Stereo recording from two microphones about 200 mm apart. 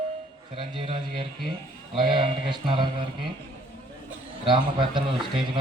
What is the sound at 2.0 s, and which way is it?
Speech, 25° right (ahead or behind).